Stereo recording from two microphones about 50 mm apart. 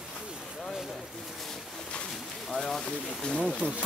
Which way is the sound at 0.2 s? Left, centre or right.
Centre.